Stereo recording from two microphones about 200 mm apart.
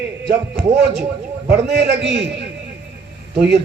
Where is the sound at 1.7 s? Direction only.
60° right (ahead or behind).